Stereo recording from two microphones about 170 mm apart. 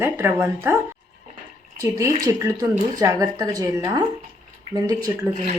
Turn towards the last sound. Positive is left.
turn(degrees=-20)  # may be behind; listen again after turning